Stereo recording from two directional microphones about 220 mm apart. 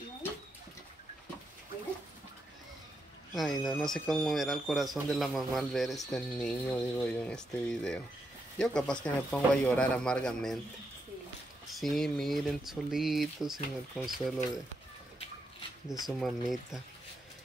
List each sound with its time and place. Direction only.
3.3 s speech: centre (ahead or behind)
11.7 s speech: centre (ahead or behind)
15.9 s speech: centre (ahead or behind)